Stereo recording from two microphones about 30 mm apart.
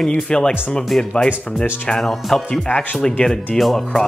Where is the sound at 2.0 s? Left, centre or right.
Centre.